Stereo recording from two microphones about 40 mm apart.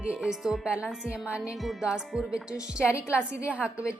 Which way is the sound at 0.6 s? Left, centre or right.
Right.